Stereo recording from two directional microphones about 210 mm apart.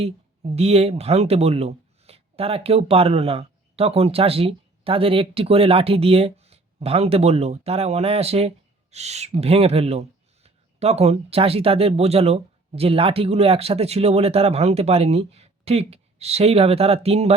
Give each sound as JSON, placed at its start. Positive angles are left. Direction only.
{"t": 0.0, "sound": "speech", "side_deg": -30}